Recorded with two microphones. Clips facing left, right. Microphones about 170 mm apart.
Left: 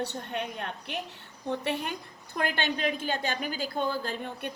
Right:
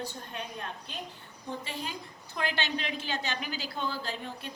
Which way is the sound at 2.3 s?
50° left (ahead or behind).